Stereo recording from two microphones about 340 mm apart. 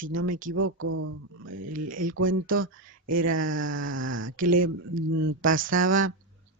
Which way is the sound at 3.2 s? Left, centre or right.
Right.